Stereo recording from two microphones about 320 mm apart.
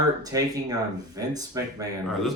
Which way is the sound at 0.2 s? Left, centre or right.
Centre.